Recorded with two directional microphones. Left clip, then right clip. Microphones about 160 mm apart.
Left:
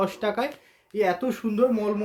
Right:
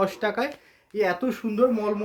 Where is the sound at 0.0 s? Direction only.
20° right (ahead or behind).